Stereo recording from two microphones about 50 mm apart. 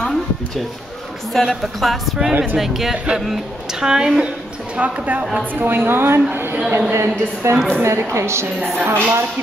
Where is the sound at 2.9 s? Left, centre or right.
Centre.